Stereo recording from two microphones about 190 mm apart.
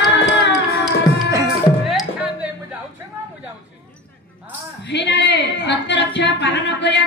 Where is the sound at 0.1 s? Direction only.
70° left (ahead or behind).